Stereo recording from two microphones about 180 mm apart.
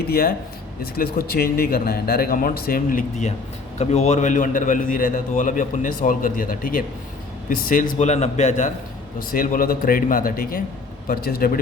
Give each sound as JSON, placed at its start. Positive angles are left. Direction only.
{"t": 0.1, "sound": "a man's voice", "side_deg": 55}
{"t": 9.3, "sound": "a man's voice", "side_deg": 50}